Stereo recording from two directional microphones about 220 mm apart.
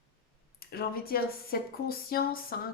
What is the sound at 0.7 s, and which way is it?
Speech, 45° left (ahead or behind).